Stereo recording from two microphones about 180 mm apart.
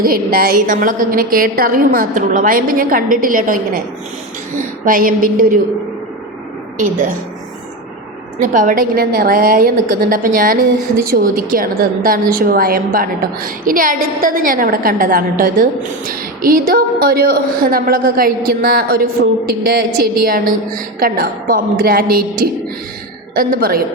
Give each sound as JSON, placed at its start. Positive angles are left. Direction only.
{"t": 0.0, "sound": "a woman's voice", "side_deg": -55}
{"t": 6.7, "sound": "a woman's voice", "side_deg": -45}
{"t": 8.4, "sound": "a woman's voice", "side_deg": -50}
{"t": 21.0, "sound": "a woman's voice", "side_deg": -55}
{"t": 23.3, "sound": "a woman's voice", "side_deg": -55}